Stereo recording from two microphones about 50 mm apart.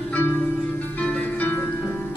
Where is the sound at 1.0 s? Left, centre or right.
Left.